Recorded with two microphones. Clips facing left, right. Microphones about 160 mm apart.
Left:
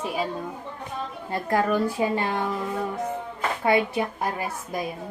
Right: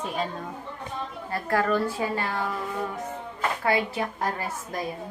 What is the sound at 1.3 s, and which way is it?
A woman's voice, 20° left (ahead or behind).